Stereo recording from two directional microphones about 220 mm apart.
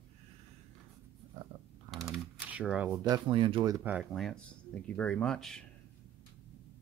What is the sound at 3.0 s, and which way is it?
Speech, 20° right (ahead or behind).